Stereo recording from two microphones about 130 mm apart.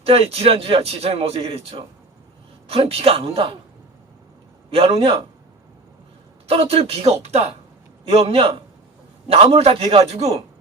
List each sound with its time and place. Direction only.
0.0 s speech: 50° right (ahead or behind)
4.7 s speech: 45° right (ahead or behind)
6.5 s speech: 50° right (ahead or behind)